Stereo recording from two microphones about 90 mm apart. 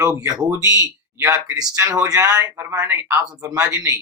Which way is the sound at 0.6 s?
35° right (ahead or behind).